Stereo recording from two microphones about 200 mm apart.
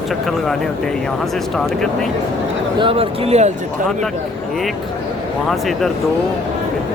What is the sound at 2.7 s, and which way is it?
Speech, 25° right (ahead or behind).